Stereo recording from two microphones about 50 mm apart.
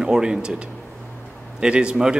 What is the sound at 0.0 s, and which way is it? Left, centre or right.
Speech, centre.